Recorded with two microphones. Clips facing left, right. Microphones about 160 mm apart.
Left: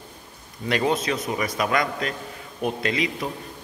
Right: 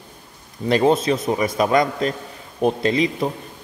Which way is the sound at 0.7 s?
35° right (ahead or behind).